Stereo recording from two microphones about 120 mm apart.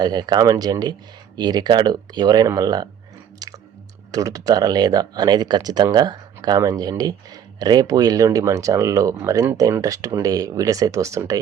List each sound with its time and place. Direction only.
0.0 s speech: 35° right (ahead or behind)
3.4 s chewing: 30° right (ahead or behind)
4.1 s speech: 30° right (ahead or behind)